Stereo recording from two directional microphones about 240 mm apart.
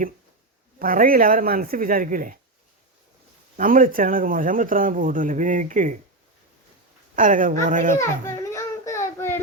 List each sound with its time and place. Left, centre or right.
0.8 s a man's voice: right
3.6 s a man's voice: right
7.2 s a man's voice: right
8.4 s a sound: centre